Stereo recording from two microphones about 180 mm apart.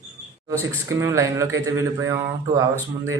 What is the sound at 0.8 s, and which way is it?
A man's voice, 15° right (ahead or behind).